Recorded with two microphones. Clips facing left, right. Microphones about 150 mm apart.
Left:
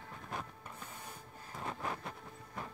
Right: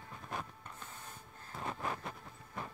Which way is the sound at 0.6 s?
10° left (ahead or behind).